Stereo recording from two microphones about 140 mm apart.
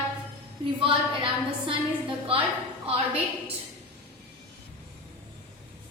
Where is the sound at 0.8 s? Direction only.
35° right (ahead or behind).